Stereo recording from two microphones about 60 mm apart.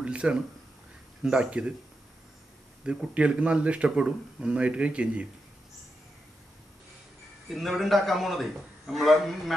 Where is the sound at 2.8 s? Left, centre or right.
Centre.